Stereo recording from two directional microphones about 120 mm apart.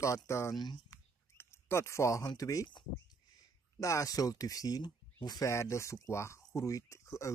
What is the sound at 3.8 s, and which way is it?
Speech, 25° left (ahead or behind).